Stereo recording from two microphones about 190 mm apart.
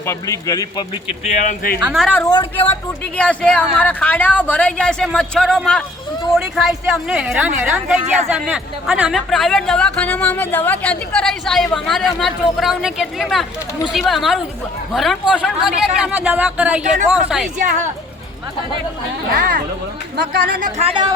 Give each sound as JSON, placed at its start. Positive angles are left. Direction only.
{"t": 0.0, "sound": "a man's voice", "side_deg": 15}
{"t": 1.2, "sound": "speech", "side_deg": 40}
{"t": 1.8, "sound": "speech", "side_deg": 0}
{"t": 2.1, "sound": "speech", "side_deg": 20}
{"t": 3.2, "sound": "speech", "side_deg": 5}
{"t": 17.6, "sound": "speech", "side_deg": -40}
{"t": 19.4, "sound": "speech", "side_deg": -50}
{"t": 20.6, "sound": "speech", "side_deg": -40}